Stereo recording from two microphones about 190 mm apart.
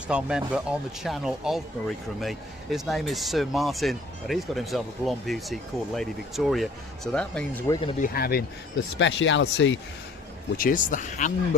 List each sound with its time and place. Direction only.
0.1 s speech: 5° right (ahead or behind)
7.7 s speech: 30° left (ahead or behind)
7.9 s speech: 50° left (ahead or behind)
9.0 s speech: 75° left (ahead or behind)
10.6 s speech: 45° left (ahead or behind)